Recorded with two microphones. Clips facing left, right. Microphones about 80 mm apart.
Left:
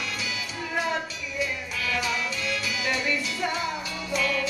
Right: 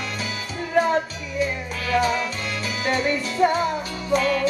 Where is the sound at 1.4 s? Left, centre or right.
Right.